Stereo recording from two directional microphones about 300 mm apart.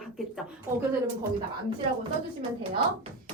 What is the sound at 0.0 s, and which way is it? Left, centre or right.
Speech, centre.